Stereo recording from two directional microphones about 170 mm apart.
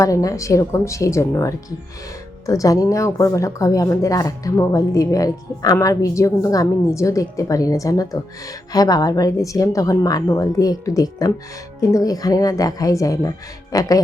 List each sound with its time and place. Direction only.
0.0 s speech: 20° left (ahead or behind)